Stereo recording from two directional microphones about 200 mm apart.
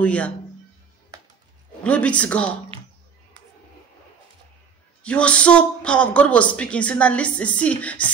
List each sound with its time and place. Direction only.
0.0 s speech: 5° left (ahead or behind)
1.1 s music: 15° right (ahead or behind)
1.8 s speech: 5° left (ahead or behind)
5.0 s speech: 5° left (ahead or behind)